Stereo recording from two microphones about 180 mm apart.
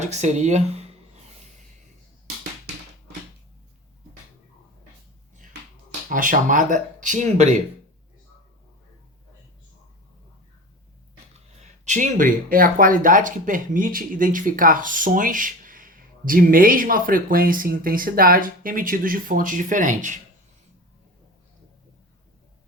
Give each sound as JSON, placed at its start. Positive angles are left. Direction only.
{"t": 0.0, "sound": "speech", "side_deg": -40}
{"t": 6.1, "sound": "speech", "side_deg": -50}
{"t": 11.6, "sound": "speech", "side_deg": -45}